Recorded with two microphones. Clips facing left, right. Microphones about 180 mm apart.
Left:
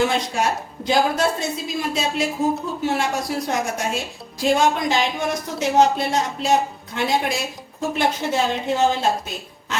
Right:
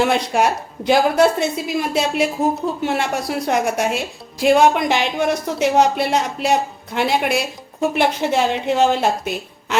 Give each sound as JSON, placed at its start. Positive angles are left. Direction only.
{"t": 0.1, "sound": "a woman's voice", "side_deg": -65}